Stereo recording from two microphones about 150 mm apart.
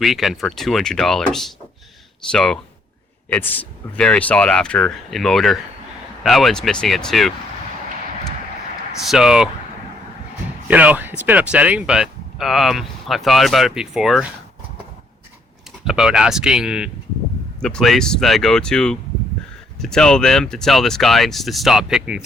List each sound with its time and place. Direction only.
0.0 s speech: centre (ahead or behind)
9.0 s speech: 5° right (ahead or behind)
10.7 s speech: 10° right (ahead or behind)
15.8 s speech: 5° right (ahead or behind)